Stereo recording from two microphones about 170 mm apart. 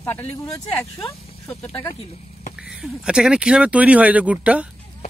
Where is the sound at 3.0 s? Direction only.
5° right (ahead or behind).